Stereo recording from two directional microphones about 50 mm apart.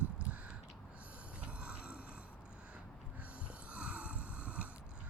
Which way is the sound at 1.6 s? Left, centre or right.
Right.